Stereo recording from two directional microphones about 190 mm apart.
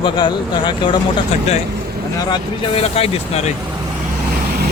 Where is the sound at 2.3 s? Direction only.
30° left (ahead or behind).